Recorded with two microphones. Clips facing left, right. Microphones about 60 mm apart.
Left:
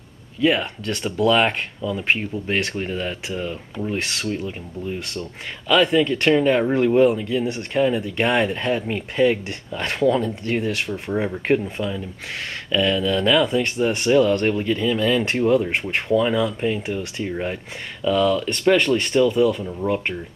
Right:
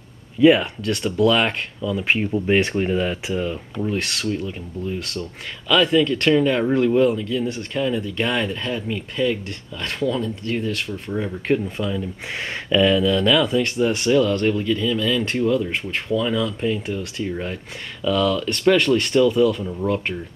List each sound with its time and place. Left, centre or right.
0.4 s speech: centre
2.3 s speech: centre; by 10.6 s left
10.7 s speech: centre
11.6 s speech: centre
12.6 s speech: centre
13.0 s speech: centre